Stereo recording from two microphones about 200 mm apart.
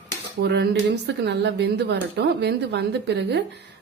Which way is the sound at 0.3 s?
55° right (ahead or behind).